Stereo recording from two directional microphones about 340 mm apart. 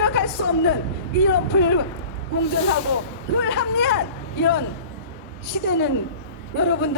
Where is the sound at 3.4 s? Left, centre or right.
Left.